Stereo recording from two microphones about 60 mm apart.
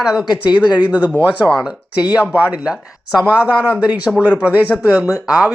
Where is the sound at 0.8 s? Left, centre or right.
Right.